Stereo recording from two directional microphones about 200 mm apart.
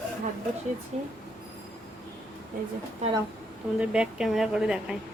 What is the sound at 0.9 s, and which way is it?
Speech, 35° right (ahead or behind).